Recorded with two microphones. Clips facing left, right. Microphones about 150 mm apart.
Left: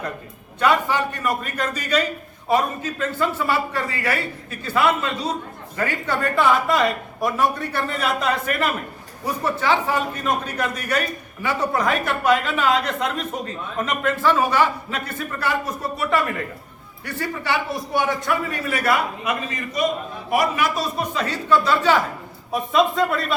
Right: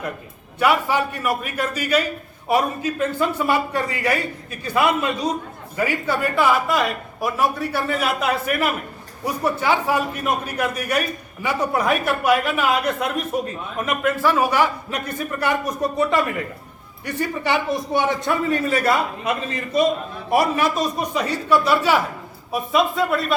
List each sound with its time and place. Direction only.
0.6 s a man's voice: 10° right (ahead or behind)